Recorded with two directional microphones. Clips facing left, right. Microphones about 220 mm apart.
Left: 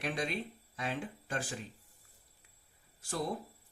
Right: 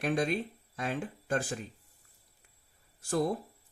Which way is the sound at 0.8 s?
50° right (ahead or behind).